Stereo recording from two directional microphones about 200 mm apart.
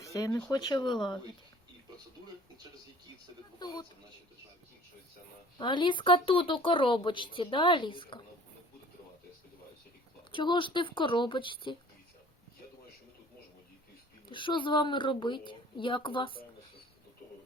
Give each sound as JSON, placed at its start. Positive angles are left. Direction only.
{"t": 0.0, "sound": "a sound", "side_deg": 15}
{"t": 0.3, "sound": "speech", "side_deg": 5}
{"t": 0.5, "sound": "speech", "side_deg": 20}
{"t": 3.6, "sound": "speech", "side_deg": 20}
{"t": 5.5, "sound": "speech", "side_deg": 25}
{"t": 10.3, "sound": "speech", "side_deg": 25}
{"t": 14.3, "sound": "speech", "side_deg": 25}